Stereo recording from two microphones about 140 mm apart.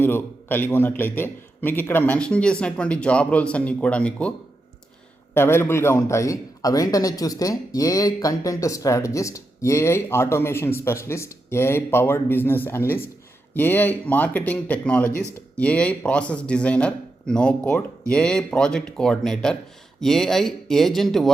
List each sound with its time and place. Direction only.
0.0 s a man's voice: 15° left (ahead or behind)